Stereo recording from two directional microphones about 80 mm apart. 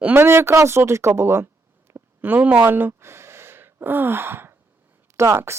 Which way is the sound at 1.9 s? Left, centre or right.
Right.